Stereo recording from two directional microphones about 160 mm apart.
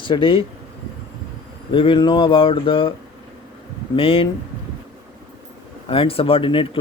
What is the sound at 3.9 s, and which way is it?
Speech, 35° left (ahead or behind).